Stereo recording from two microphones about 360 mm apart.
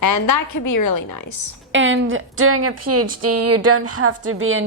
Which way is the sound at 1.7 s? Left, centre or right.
Right.